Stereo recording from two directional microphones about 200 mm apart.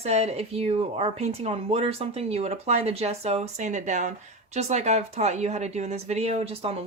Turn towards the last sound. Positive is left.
turn(degrees=-30)  # may be behind; listen again after turning